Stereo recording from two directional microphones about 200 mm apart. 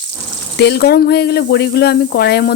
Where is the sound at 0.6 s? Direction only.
55° left (ahead or behind).